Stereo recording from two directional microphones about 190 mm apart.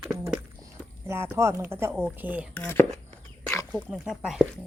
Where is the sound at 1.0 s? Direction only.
15° right (ahead or behind).